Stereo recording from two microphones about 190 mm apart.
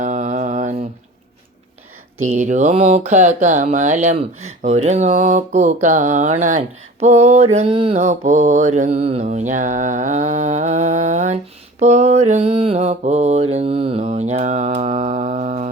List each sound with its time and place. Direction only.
0.0 s mantra: 40° right (ahead or behind)
2.2 s mantra: 40° right (ahead or behind)
8.0 s mantra: 40° right (ahead or behind)